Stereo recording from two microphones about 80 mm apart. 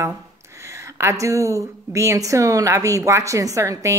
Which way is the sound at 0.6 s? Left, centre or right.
Right.